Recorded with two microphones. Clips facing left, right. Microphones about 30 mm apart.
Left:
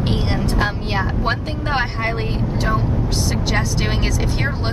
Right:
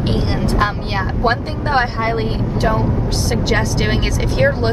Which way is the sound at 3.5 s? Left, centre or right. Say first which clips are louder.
Right 4 dB; centre.